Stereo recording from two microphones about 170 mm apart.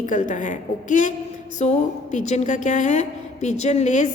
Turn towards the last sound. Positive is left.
turn(degrees=45)  # may be behind; listen again after turning